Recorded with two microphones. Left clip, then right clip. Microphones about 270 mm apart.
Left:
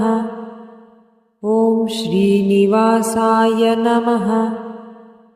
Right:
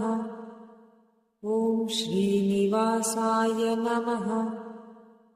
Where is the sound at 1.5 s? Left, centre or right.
Left.